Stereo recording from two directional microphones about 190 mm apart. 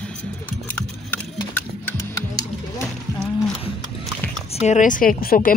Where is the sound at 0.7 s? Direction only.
10° left (ahead or behind).